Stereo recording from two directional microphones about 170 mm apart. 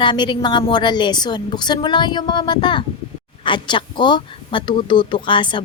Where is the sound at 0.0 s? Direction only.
30° left (ahead or behind).